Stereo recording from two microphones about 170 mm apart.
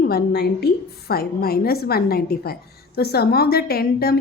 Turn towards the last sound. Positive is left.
turn(degrees=65)  # may be behind; listen again after turning